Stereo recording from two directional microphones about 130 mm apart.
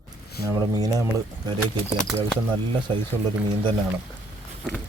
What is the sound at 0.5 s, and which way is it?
Speech, 25° right (ahead or behind).